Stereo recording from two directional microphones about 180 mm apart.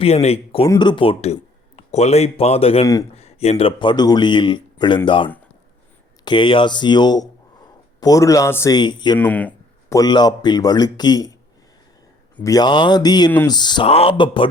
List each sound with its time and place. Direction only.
0.0 s a man's voice: 35° left (ahead or behind)
2.8 s a man's voice: 20° left (ahead or behind)
3.2 s a man's voice: 35° left (ahead or behind)
9.1 s speech: 10° left (ahead or behind)
10.0 s a man's voice: 25° left (ahead or behind)
12.4 s a man's voice: 20° left (ahead or behind)